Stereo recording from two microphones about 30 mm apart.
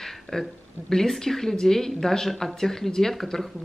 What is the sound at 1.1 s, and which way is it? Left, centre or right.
Speech, centre.